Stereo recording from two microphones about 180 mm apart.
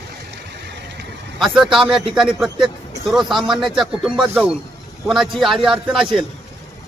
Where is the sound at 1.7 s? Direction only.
Centre (ahead or behind).